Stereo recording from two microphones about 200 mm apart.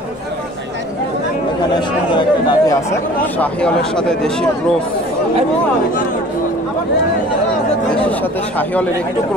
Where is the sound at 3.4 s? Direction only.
5° left (ahead or behind).